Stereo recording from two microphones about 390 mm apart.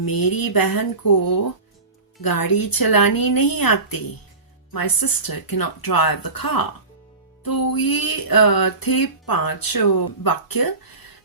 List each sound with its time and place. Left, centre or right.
0.0 s speech: left